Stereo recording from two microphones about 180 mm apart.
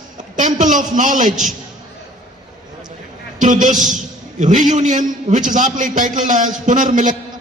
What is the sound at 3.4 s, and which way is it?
Speech, 45° right (ahead or behind).